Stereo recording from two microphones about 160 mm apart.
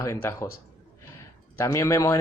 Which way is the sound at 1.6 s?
15° left (ahead or behind).